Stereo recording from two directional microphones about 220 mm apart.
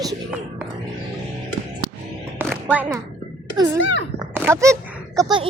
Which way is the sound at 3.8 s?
55° left (ahead or behind).